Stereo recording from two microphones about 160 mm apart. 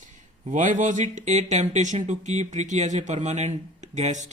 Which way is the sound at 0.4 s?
50° right (ahead or behind).